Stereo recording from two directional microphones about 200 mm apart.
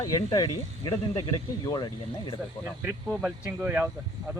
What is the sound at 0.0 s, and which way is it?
Speech, 20° left (ahead or behind).